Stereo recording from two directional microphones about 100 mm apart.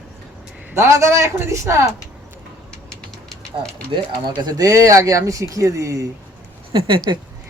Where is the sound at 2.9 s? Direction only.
10° left (ahead or behind).